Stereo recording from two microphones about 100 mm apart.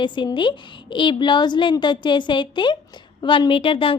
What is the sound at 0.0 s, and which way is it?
A woman's voice, 55° left (ahead or behind).